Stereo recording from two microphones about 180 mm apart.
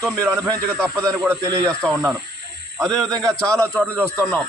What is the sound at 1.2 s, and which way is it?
Speech, 15° right (ahead or behind).